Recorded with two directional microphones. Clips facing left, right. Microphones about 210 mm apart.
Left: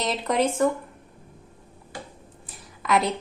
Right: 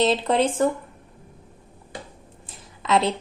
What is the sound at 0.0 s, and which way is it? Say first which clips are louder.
Speech: right 4 dB; 30° right (ahead or behind).